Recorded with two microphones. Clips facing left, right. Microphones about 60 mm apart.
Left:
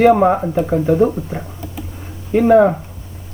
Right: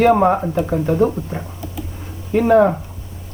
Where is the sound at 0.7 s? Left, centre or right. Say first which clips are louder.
Left 3 dB; centre.